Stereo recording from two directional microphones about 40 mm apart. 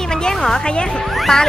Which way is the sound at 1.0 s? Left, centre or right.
Centre.